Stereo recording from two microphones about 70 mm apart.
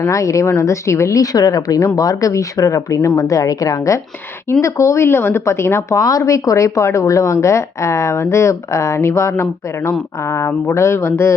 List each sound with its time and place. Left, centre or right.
0.1 s speech: left
6.0 s speech: left